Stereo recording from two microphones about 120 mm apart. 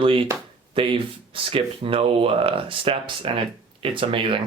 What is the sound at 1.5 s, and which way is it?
Speech, 50° right (ahead or behind).